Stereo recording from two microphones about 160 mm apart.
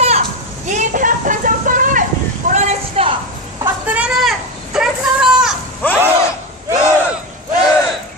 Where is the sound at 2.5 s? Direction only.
45° right (ahead or behind).